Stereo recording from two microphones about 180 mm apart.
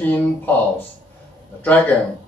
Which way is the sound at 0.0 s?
10° left (ahead or behind).